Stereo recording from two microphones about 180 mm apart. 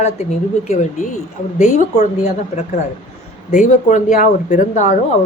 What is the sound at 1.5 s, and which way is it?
Speech, 45° left (ahead or behind).